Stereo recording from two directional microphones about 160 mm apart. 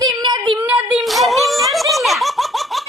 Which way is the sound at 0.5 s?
10° right (ahead or behind).